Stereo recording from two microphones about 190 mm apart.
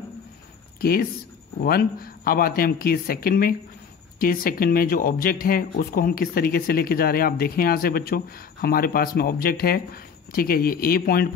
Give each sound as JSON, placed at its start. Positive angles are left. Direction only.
{"t": 0.7, "sound": "speech", "side_deg": 50}